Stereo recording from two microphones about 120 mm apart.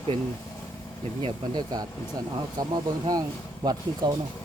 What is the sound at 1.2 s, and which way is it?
Speech, 35° right (ahead or behind).